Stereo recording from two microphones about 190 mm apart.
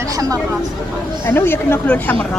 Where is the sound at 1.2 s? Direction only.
10° left (ahead or behind).